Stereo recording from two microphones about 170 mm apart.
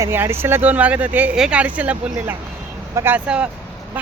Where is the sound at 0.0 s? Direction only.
15° right (ahead or behind).